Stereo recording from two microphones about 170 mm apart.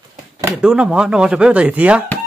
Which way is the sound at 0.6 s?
5° right (ahead or behind).